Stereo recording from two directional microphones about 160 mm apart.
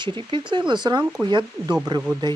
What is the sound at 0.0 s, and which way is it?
Speech, 30° right (ahead or behind).